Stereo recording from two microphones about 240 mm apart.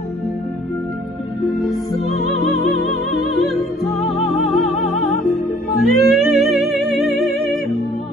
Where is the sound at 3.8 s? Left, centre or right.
Left.